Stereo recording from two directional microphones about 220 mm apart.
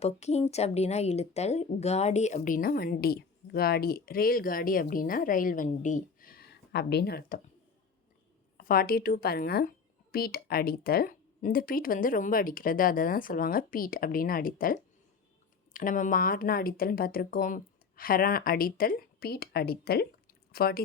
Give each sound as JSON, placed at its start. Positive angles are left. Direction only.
{"t": 0.0, "sound": "a woman's voice", "side_deg": 30}
{"t": 8.5, "sound": "a woman's voice", "side_deg": 40}